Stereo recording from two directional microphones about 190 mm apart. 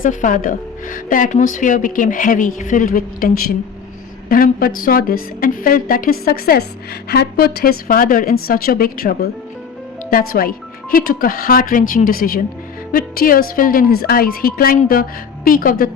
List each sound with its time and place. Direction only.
0.0 s a woman's voice: 45° left (ahead or behind)